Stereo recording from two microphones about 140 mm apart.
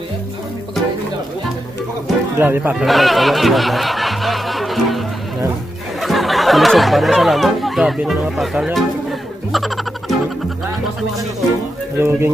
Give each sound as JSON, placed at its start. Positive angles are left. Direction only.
{"t": 2.3, "sound": "speech", "side_deg": -15}
{"t": 2.8, "sound": "music", "side_deg": 0}
{"t": 5.9, "sound": "speech", "side_deg": 0}
{"t": 9.5, "sound": "music", "side_deg": 0}
{"t": 12.0, "sound": "speech", "side_deg": -15}